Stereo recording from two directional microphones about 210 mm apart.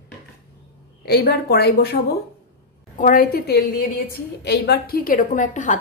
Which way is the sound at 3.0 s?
40° left (ahead or behind).